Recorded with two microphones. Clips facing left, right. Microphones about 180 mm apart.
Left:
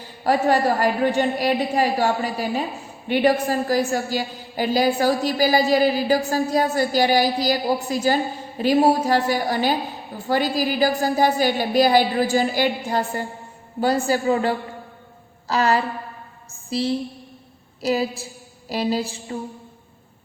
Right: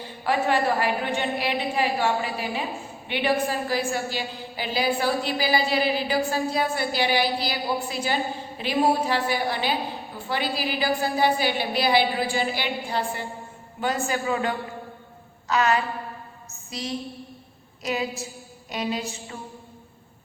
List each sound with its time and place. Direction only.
0.3 s a woman's voice: 40° left (ahead or behind)